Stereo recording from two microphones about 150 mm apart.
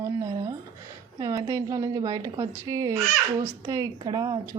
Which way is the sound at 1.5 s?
20° right (ahead or behind).